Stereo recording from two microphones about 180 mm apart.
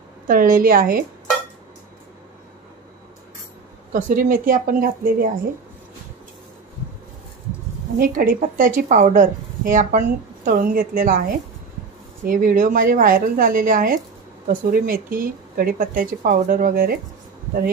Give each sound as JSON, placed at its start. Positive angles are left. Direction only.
{"t": 0.3, "sound": "a woman's voice", "side_deg": -50}
{"t": 3.9, "sound": "a woman's voice", "side_deg": -50}
{"t": 8.0, "sound": "a woman's voice", "side_deg": -50}